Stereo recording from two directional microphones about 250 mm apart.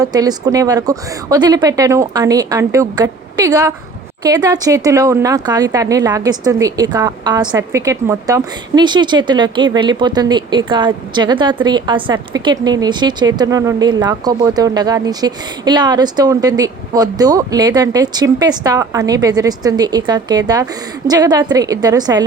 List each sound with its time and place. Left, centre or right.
0.0 s a woman's voice: centre